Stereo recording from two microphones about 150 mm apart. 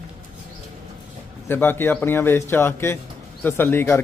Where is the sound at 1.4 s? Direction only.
15° left (ahead or behind).